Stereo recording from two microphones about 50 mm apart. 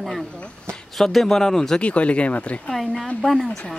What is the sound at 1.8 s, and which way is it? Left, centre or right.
Speech, left.